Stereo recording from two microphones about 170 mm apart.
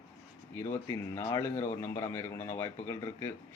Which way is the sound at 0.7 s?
15° left (ahead or behind).